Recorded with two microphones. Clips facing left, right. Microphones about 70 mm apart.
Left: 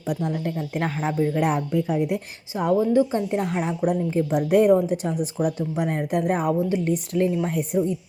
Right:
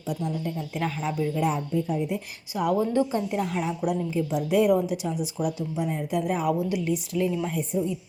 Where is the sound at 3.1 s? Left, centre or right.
Left.